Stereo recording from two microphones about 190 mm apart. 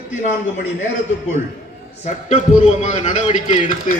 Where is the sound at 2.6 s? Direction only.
40° left (ahead or behind).